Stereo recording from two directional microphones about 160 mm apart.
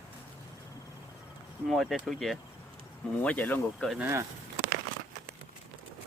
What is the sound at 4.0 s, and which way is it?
Speech, 15° right (ahead or behind).